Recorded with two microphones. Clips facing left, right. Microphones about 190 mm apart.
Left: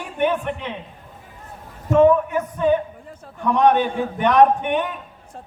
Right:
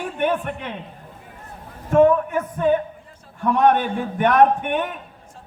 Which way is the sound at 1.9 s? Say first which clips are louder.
Left 1 dB; 50° right (ahead or behind).